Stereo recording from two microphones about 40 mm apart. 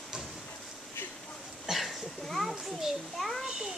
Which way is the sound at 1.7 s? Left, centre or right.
Centre.